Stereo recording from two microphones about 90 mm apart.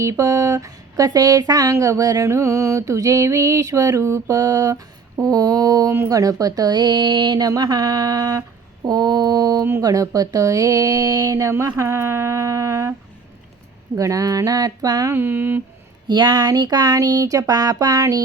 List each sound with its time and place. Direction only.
0.0 s speech: 35° right (ahead or behind)
13.9 s speech: 40° right (ahead or behind)
15.1 s a sound: 25° right (ahead or behind)
16.0 s speech: 55° right (ahead or behind)